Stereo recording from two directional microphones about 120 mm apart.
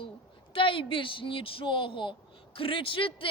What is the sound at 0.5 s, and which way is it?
Speech, 45° left (ahead or behind).